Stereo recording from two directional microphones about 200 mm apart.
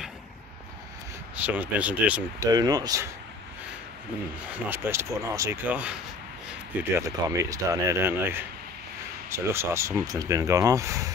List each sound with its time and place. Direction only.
1.4 s speech: 10° right (ahead or behind)
2.5 s speech: 20° right (ahead or behind)
4.6 s speech: 10° right (ahead or behind)